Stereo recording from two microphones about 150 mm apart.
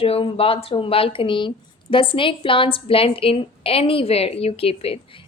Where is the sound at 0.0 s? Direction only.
40° left (ahead or behind).